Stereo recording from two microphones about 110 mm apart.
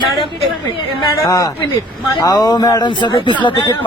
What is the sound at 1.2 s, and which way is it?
A man's voice, 30° left (ahead or behind).